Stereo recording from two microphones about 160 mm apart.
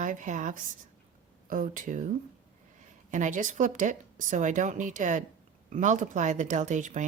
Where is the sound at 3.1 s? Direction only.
50° right (ahead or behind).